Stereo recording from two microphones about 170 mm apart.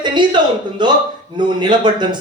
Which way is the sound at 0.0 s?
25° right (ahead or behind).